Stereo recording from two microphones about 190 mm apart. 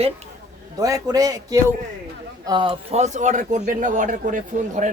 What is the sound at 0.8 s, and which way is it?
A man's voice, 20° right (ahead or behind).